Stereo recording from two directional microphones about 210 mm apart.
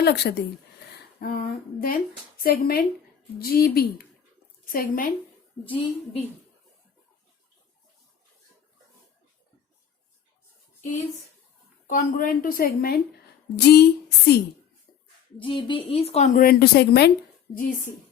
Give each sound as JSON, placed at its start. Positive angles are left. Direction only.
{"t": 0.0, "sound": "a woman's voice", "side_deg": 50}
{"t": 10.8, "sound": "a sound", "side_deg": 35}
{"t": 11.9, "sound": "a woman's voice", "side_deg": 40}
{"t": 15.4, "sound": "a woman's voice", "side_deg": 25}